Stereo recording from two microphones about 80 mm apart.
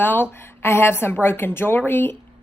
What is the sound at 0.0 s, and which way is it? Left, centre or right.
Speech, left.